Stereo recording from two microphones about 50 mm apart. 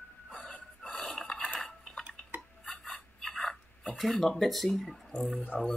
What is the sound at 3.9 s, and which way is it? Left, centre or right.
Speech, centre.